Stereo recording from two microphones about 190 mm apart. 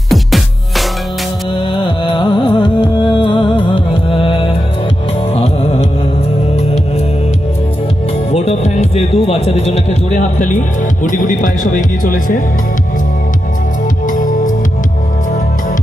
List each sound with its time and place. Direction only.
0.1 s music: centre (ahead or behind)
2.1 s music: 25° left (ahead or behind)
8.3 s speech: 35° left (ahead or behind)
14.0 s music: 45° left (ahead or behind)